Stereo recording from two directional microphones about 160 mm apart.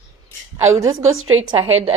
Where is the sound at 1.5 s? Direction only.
35° right (ahead or behind).